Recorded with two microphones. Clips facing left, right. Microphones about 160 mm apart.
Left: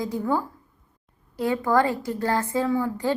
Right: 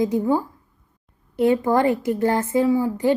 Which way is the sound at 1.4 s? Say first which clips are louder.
Right 4 dB; 20° right (ahead or behind).